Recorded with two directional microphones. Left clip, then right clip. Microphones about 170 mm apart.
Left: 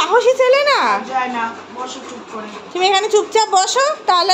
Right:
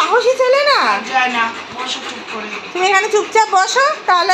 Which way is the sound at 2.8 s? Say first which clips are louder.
Right 1 dB; 20° left (ahead or behind).